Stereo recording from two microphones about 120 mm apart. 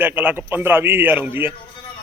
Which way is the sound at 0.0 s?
15° right (ahead or behind).